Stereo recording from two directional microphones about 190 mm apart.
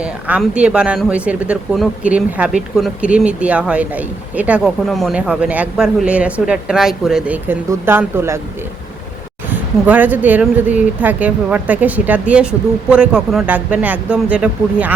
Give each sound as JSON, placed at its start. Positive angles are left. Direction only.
{"t": 0.0, "sound": "speech", "side_deg": -5}
{"t": 9.5, "sound": "speech", "side_deg": -10}